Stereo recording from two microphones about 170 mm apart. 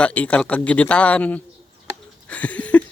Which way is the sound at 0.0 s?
5° left (ahead or behind).